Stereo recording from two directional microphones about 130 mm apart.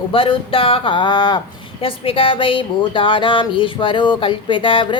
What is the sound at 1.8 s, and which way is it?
Speech, 45° left (ahead or behind).